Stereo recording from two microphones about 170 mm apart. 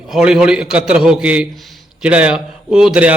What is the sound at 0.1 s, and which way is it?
A man's voice, 5° right (ahead or behind).